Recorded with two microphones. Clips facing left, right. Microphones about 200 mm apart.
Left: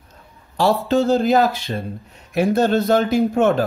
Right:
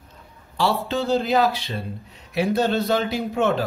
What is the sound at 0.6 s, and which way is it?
Speech, 45° left (ahead or behind).